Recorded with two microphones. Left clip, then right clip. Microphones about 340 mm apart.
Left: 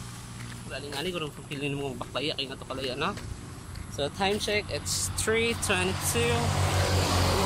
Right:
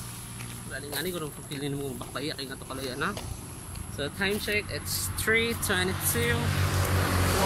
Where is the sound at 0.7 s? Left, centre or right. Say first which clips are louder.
Left 1 dB; centre.